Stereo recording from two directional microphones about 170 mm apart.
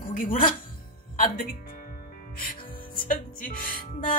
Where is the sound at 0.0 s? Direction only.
55° left (ahead or behind).